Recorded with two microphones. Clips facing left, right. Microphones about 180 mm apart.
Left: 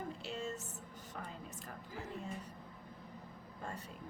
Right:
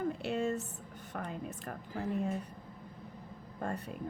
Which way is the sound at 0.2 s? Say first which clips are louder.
Right 9 dB; 60° right (ahead or behind).